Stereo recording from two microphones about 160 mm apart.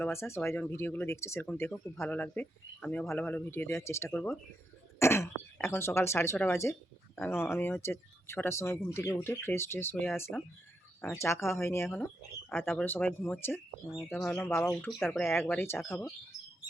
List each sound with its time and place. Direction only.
0.0 s speech: 15° left (ahead or behind)
4.1 s speech: 5° left (ahead or behind)
4.9 s speech: 15° left (ahead or behind)
14.7 s speech: centre (ahead or behind)
15.2 s speech: 15° left (ahead or behind)